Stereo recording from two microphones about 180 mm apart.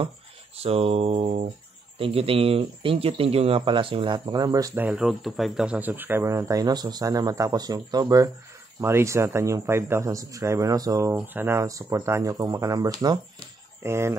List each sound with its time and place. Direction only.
0.6 s speech: 35° right (ahead or behind)
4.8 s speech: 5° right (ahead or behind)